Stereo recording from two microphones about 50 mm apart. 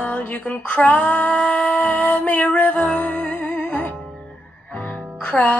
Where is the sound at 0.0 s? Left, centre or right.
Left.